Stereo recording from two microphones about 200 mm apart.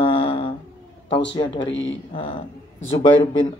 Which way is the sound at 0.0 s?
25° left (ahead or behind).